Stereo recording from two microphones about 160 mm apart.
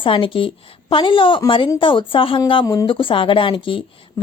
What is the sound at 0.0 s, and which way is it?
A woman's voice, 30° left (ahead or behind).